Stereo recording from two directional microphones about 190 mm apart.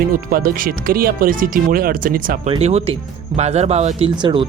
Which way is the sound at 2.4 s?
30° right (ahead or behind).